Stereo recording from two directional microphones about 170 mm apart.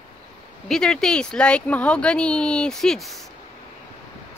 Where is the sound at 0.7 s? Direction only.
5° left (ahead or behind).